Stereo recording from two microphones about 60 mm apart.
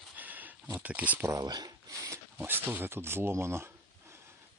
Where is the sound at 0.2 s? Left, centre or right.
Right.